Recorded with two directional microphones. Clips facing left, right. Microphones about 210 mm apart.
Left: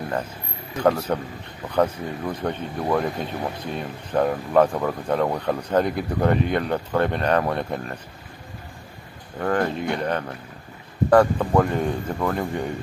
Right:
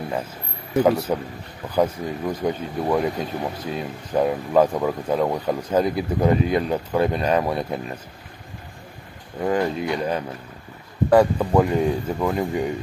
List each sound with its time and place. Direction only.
1.1 s speech: 10° right (ahead or behind)
9.4 s speech: 10° right (ahead or behind)